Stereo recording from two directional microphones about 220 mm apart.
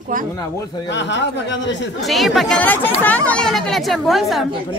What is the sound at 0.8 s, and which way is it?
Speech, 55° left (ahead or behind).